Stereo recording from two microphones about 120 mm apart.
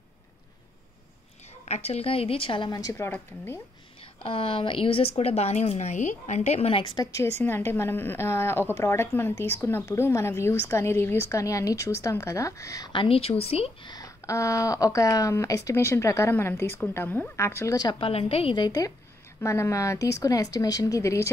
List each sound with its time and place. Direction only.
1.7 s speech: 60° left (ahead or behind)
2.7 s a woman's voice: 30° left (ahead or behind)
4.2 s a woman's voice: 50° left (ahead or behind)
6.8 s a woman's voice: 30° left (ahead or behind)
12.9 s speech: 50° left (ahead or behind)
13.8 s a woman's voice: 30° left (ahead or behind)
17.9 s a woman's voice: 50° left (ahead or behind); by 21.3 s 25° left (ahead or behind)